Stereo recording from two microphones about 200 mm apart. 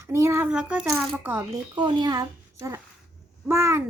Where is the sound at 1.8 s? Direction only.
20° right (ahead or behind).